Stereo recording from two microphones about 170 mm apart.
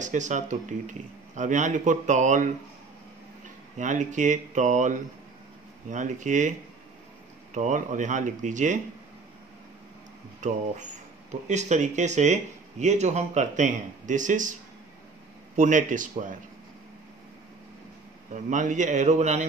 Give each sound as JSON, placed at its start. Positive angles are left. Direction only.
{"t": 0.0, "sound": "speech", "side_deg": -45}
{"t": 7.5, "sound": "speech", "side_deg": -45}
{"t": 10.4, "sound": "speech", "side_deg": -45}
{"t": 15.5, "sound": "speech", "side_deg": -50}
{"t": 18.3, "sound": "speech", "side_deg": -45}